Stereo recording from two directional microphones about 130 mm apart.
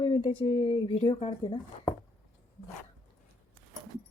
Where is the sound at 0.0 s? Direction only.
45° left (ahead or behind).